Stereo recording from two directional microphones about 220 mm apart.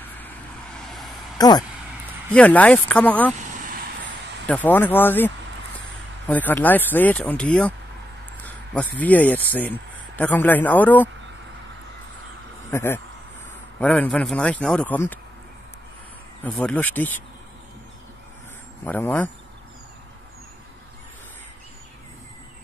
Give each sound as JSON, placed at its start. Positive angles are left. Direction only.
{"t": 0.7, "sound": "a sound", "side_deg": 0}
{"t": 1.4, "sound": "speech", "side_deg": 15}
{"t": 2.3, "sound": "speech", "side_deg": 5}
{"t": 3.5, "sound": "vehicle", "side_deg": -35}
{"t": 4.5, "sound": "speech", "side_deg": 10}
{"t": 12.7, "sound": "a man's voice", "side_deg": 10}
{"t": 16.4, "sound": "speech", "side_deg": 5}
{"t": 18.9, "sound": "speech", "side_deg": 10}